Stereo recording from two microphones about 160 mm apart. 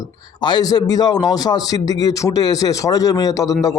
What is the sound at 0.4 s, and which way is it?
A man's voice, 25° left (ahead or behind).